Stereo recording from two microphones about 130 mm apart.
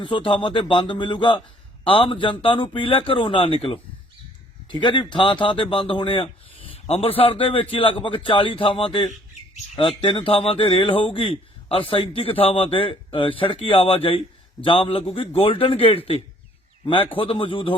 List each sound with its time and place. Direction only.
0.0 s speech: 40° left (ahead or behind)